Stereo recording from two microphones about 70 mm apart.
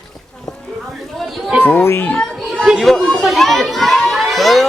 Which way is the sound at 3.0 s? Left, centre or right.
Centre.